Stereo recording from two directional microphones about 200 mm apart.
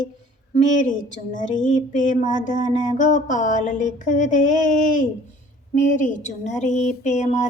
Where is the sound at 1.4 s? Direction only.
40° left (ahead or behind).